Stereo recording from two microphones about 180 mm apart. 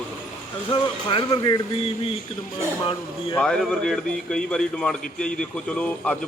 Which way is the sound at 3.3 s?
5° left (ahead or behind).